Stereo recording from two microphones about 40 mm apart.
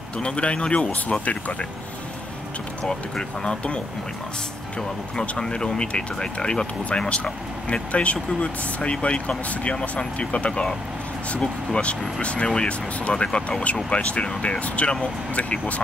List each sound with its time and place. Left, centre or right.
0.2 s speech: left
1.2 s speech: left
2.8 s speech: centre
5.4 s speech: centre
10.5 s speech: left
12.2 s speech: left